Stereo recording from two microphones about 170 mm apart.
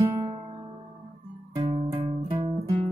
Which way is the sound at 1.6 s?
30° right (ahead or behind).